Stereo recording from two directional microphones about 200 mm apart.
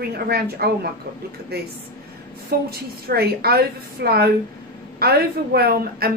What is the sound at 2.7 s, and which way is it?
A woman's voice, 50° right (ahead or behind).